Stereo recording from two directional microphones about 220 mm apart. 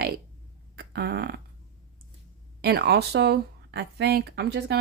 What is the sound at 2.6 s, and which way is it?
Speech, 50° right (ahead or behind).